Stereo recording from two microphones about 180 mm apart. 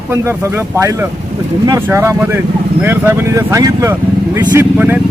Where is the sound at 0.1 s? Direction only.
15° right (ahead or behind).